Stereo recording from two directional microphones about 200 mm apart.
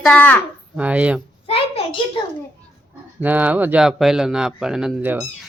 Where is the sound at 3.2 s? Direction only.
10° right (ahead or behind).